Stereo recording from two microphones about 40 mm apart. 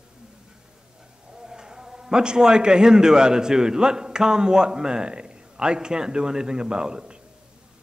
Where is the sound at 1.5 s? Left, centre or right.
Centre.